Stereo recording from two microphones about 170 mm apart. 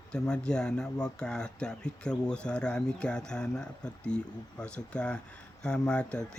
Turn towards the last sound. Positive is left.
turn(degrees=5)  # may be behind; listen again after turning